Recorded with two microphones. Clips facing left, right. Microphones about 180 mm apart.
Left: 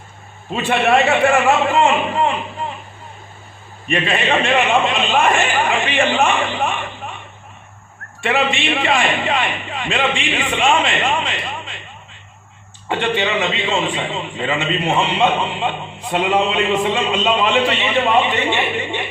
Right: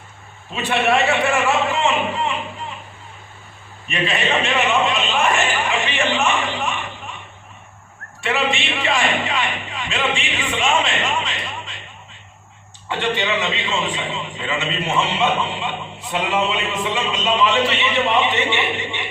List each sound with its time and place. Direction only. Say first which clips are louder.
0.5 s a man's voice: left 3 dB; 55° left (ahead or behind)
3.8 s a man's voice: left 3 dB; 50° left (ahead or behind)
8.3 s a man's voice: left 3 dB; 50° left (ahead or behind)
12.9 s a man's voice: left 3 dB; 50° left (ahead or behind)